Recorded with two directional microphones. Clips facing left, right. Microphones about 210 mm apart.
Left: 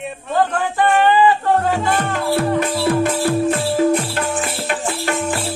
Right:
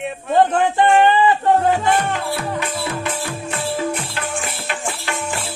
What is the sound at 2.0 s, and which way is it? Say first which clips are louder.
Music: left 3 dB; 50° left (ahead or behind).